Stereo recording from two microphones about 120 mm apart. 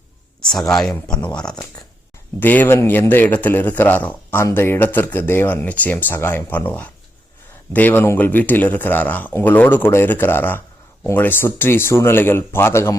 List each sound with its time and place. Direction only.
0.5 s speech: 5° left (ahead or behind); by 13.0 s 20° left (ahead or behind)